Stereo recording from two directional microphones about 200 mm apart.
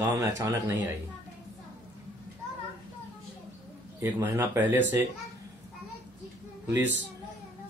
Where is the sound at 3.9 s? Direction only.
10° right (ahead or behind).